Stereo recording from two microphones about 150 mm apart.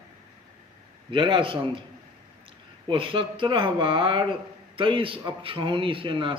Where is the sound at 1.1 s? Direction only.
35° right (ahead or behind).